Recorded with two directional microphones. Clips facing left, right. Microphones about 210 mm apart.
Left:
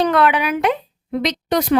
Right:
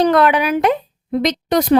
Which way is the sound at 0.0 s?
40° right (ahead or behind).